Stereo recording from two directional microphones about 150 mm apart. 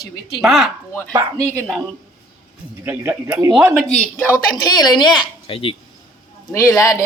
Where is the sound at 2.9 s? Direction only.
15° right (ahead or behind).